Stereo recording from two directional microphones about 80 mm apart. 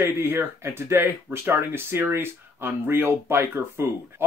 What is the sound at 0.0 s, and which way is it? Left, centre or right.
Speech, right.